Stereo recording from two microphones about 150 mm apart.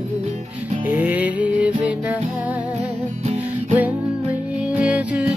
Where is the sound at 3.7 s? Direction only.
10° right (ahead or behind).